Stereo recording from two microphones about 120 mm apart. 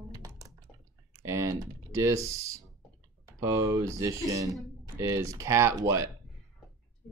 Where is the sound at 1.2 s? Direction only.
25° right (ahead or behind).